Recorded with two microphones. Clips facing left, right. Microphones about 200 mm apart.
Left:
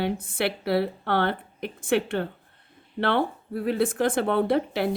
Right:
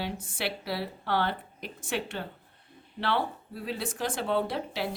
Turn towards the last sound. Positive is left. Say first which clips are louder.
# left 7 dB
turn(degrees=55)  # may be behind; listen again after turning